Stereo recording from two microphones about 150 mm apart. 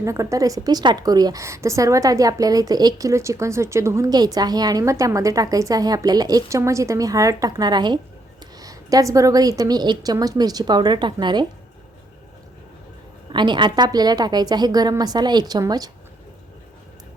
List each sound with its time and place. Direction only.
0.0 s a woman's voice: 20° right (ahead or behind)
13.3 s a woman's voice: 30° right (ahead or behind)